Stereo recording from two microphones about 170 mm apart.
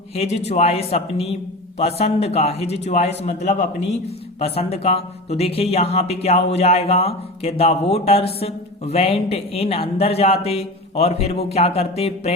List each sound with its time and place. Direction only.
0.2 s speech: 40° left (ahead or behind)